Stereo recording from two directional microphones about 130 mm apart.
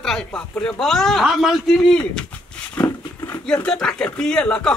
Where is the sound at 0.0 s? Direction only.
5° left (ahead or behind).